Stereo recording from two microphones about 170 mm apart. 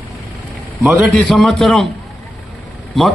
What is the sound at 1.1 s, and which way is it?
Speech, centre (ahead or behind).